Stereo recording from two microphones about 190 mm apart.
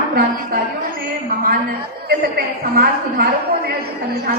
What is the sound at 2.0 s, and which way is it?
A woman's voice, 55° right (ahead or behind).